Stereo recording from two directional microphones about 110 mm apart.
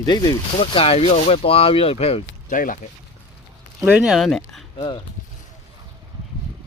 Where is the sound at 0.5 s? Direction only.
60° left (ahead or behind).